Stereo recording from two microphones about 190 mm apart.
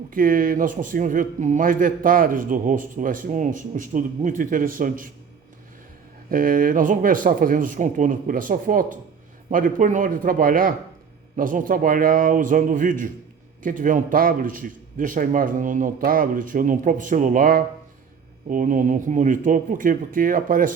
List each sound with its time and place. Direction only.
0.1 s a man's voice: 45° right (ahead or behind)
6.3 s a man's voice: 45° right (ahead or behind)